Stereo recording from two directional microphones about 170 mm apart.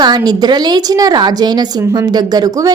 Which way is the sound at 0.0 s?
25° right (ahead or behind).